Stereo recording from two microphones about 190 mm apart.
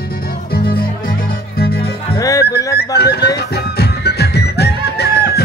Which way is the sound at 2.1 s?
15° left (ahead or behind).